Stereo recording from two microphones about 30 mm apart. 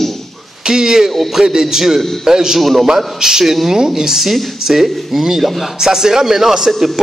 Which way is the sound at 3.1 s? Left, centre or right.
Centre.